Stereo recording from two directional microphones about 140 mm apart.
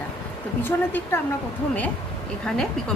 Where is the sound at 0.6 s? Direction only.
15° left (ahead or behind).